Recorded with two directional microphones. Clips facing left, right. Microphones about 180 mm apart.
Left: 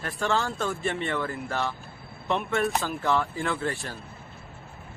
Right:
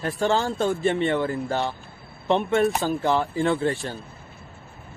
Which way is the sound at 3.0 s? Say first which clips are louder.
Right 2 dB; 30° right (ahead or behind).